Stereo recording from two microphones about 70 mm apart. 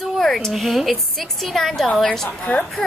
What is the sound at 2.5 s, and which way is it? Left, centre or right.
Speech, left.